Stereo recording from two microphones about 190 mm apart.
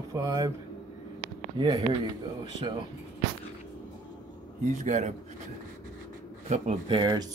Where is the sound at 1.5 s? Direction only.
25° right (ahead or behind).